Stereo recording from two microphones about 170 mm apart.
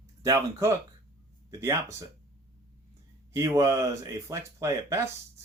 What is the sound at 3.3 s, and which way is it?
Speech, 20° right (ahead or behind).